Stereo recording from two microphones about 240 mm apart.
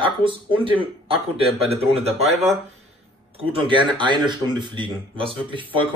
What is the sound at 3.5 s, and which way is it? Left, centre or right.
Speech, centre.